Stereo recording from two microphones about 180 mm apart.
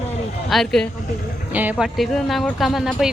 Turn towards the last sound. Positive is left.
turn(degrees=0)  # may be behind; listen again after turning